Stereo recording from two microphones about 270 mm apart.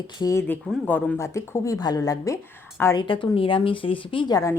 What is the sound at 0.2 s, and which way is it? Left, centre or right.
Speech, centre.